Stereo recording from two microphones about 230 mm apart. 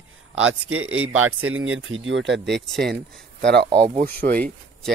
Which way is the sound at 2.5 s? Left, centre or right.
Centre.